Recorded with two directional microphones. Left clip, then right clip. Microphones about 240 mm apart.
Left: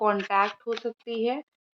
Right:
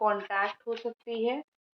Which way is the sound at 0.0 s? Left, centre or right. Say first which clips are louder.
Left 4 dB; left.